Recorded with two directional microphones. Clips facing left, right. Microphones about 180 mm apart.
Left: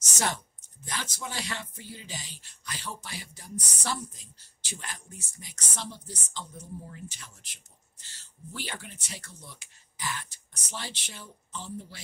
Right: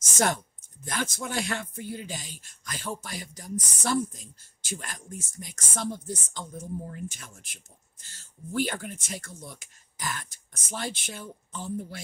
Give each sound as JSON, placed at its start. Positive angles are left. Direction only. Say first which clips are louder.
{"t": 0.8, "sound": "speech", "louder": "right 5 dB", "side_deg": -50}